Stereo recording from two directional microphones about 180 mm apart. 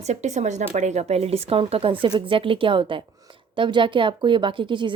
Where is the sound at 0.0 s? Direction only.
40° right (ahead or behind).